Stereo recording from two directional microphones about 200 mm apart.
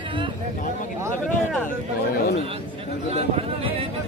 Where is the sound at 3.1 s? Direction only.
30° right (ahead or behind).